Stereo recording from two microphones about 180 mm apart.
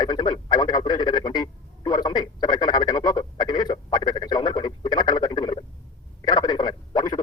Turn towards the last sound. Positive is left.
turn(degrees=25)  # may be behind; listen again after turning